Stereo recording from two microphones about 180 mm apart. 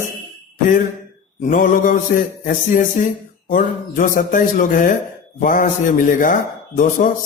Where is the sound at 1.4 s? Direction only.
50° left (ahead or behind).